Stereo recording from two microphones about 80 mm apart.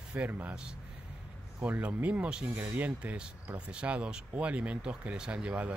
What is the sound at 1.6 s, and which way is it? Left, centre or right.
Speech, right.